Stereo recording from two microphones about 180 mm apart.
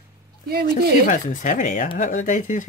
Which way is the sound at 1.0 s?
45° left (ahead or behind).